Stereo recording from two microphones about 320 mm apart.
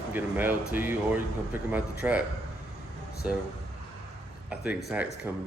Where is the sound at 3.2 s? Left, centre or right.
Centre.